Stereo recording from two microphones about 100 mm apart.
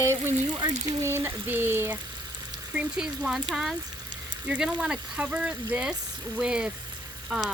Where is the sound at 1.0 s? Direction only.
25° right (ahead or behind).